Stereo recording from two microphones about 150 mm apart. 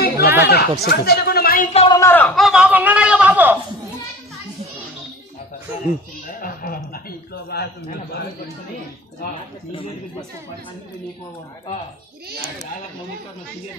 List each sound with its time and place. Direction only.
0.2 s speech: 15° right (ahead or behind)
0.5 s speech: 90° left
1.7 s a man's voice: 40° left (ahead or behind)
2.0 s speech: 15° left (ahead or behind)
2.2 s speech: centre (ahead or behind)
6.4 s a sound: 75° left (ahead or behind)